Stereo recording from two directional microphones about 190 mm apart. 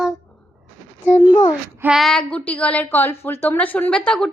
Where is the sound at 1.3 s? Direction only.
25° left (ahead or behind).